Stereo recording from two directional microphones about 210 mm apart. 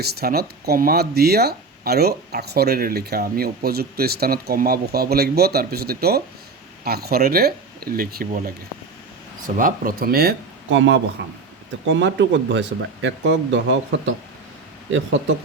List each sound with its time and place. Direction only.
0.0 s speech: 50° right (ahead or behind)